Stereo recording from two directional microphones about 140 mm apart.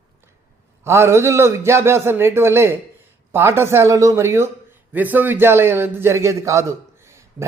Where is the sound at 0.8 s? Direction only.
20° right (ahead or behind).